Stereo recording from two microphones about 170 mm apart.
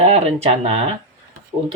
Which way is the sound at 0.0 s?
35° right (ahead or behind).